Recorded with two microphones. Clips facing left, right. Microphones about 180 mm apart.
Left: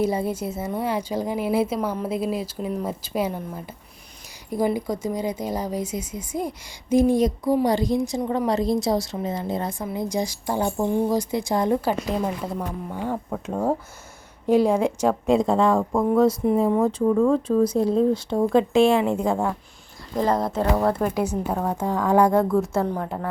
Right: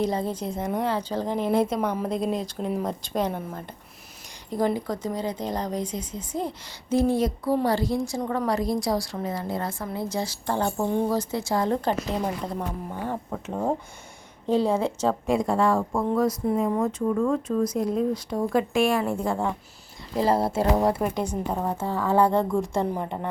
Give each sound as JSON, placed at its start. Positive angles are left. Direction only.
{"t": 0.0, "sound": "a woman's voice", "side_deg": 10}
{"t": 16.6, "sound": "speech", "side_deg": 30}
{"t": 20.2, "sound": "speech", "side_deg": -30}
{"t": 20.5, "sound": "speech", "side_deg": -10}
{"t": 21.0, "sound": "a woman's voice", "side_deg": 5}